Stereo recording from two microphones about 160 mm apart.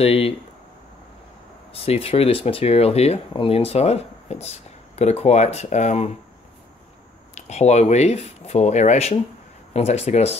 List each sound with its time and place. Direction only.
0.0 s speech: 35° left (ahead or behind)
1.7 s speech: 35° left (ahead or behind)
7.3 s speech: 45° left (ahead or behind)